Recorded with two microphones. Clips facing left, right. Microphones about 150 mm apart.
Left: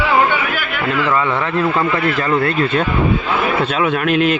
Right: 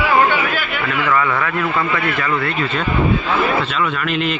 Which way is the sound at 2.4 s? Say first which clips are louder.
Left 4 dB; 50° left (ahead or behind).